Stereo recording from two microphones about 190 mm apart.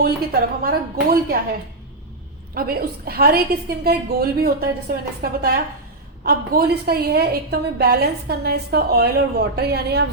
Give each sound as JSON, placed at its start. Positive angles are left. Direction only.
{"t": 0.0, "sound": "a woman's voice", "side_deg": -55}
{"t": 2.6, "sound": "a woman's voice", "side_deg": -50}